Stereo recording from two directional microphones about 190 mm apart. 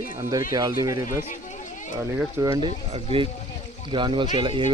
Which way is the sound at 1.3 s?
40° left (ahead or behind).